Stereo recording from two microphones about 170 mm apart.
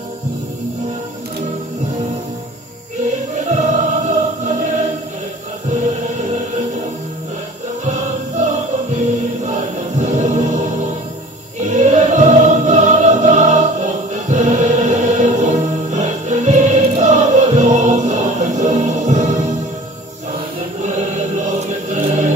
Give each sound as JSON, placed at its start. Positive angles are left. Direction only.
{"t": 3.3, "sound": "music", "side_deg": -40}
{"t": 7.8, "sound": "music", "side_deg": -45}
{"t": 9.5, "sound": "music", "side_deg": -40}
{"t": 11.7, "sound": "music", "side_deg": -45}
{"t": 21.5, "sound": "choir", "side_deg": -45}